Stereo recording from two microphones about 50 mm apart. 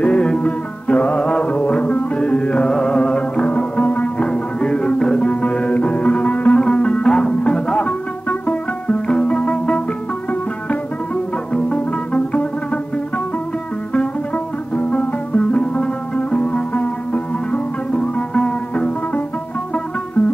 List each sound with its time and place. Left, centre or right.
0.0 s music: left
11.5 s music: left
13.9 s music: left